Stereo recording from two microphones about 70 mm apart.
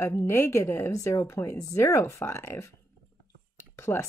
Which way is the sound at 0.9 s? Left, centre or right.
Left.